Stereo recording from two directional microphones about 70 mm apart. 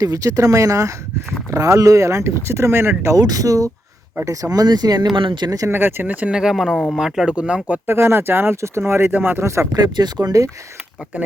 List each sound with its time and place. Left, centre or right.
0.0 s speech: right
3.2 s speech: right
5.3 s speech: right
5.7 s speech: right
6.3 s speech: centre
7.3 s speech: centre
7.9 s speech: right
9.4 s speech: right
9.7 s speech: right